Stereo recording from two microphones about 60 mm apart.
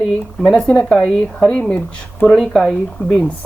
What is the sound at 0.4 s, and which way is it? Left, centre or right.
A woman's voice, centre.